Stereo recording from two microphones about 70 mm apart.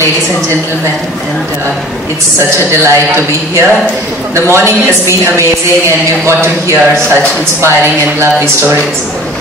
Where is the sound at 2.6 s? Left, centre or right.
Right.